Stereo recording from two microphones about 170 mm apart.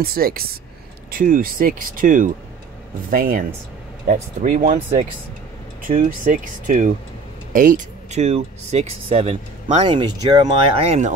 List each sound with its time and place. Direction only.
0.0 s speech: 60° right (ahead or behind); by 11.1 s 40° right (ahead or behind)